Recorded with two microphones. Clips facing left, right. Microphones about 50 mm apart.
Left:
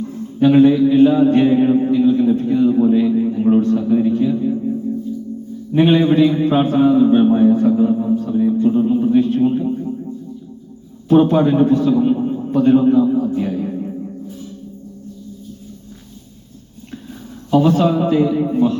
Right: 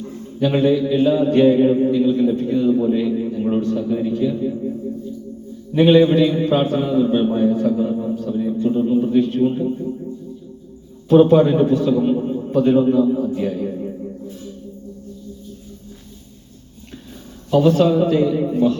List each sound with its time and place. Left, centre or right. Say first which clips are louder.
0.4 s a man's voice: left 6 dB; centre
4.3 s a sound: left 4 dB; centre
5.7 s a man's voice: even; left
7.9 s a man's voice: left 5 dB; centre
11.1 s a man's voice: right 1 dB; centre
17.7 s a man's voice: even; left